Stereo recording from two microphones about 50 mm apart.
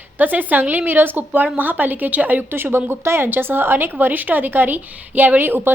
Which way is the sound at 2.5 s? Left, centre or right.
Right.